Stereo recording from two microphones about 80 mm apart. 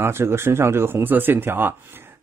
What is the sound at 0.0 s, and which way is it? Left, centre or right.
Speech, right.